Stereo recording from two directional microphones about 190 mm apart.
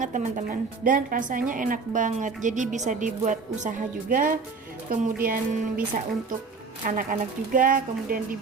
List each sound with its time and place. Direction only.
0.0 s a woman's voice: 40° right (ahead or behind)
6.8 s speech: 45° right (ahead or behind)